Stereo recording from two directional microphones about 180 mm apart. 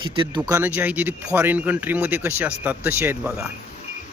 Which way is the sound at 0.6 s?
10° right (ahead or behind).